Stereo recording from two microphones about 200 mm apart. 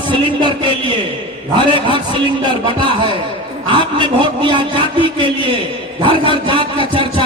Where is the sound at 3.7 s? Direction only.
25° right (ahead or behind).